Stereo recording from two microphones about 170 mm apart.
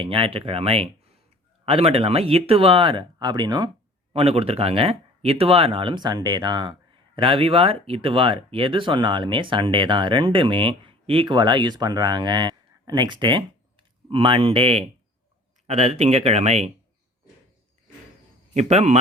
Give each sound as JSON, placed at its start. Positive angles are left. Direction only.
{"t": 0.0, "sound": "speech", "side_deg": -30}
{"t": 18.5, "sound": "speech", "side_deg": -40}